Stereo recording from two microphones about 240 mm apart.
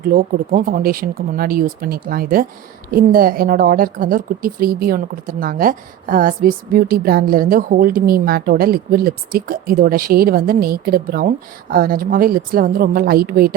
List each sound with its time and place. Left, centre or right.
0.0 s a woman's voice: right